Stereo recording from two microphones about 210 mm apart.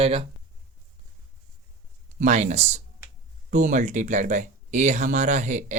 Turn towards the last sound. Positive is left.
turn(degrees=-35)  # may be behind; listen again after turning